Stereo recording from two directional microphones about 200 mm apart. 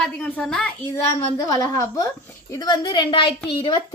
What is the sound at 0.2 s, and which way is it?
A woman's voice, 5° left (ahead or behind).